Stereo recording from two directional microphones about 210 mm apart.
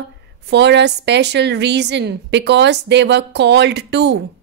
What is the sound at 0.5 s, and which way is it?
A woman's voice, 55° right (ahead or behind).